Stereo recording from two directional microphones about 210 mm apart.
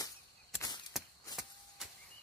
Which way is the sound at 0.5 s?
20° left (ahead or behind).